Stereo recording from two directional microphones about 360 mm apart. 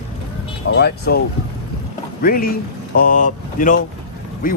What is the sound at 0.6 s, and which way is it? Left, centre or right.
Speech, left.